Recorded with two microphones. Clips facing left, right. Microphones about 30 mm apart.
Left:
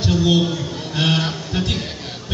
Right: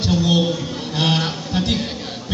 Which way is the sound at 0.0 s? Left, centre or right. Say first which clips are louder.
Even; right.